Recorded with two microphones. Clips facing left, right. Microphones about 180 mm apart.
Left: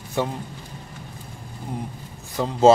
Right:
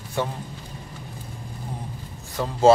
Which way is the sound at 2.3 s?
20° left (ahead or behind).